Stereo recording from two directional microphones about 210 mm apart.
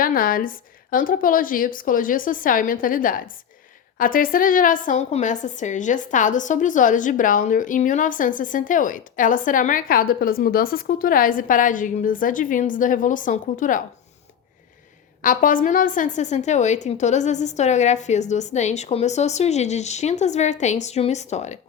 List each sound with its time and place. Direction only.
0.0 s a woman's voice: 40° left (ahead or behind)
15.2 s a woman's voice: 40° left (ahead or behind)